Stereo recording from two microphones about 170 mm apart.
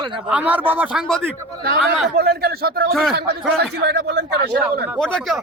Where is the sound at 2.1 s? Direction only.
70° right (ahead or behind).